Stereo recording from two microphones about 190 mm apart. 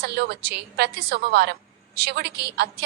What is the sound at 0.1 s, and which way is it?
A woman's voice, 60° right (ahead or behind).